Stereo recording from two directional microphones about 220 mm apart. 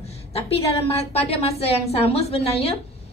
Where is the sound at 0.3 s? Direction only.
25° left (ahead or behind).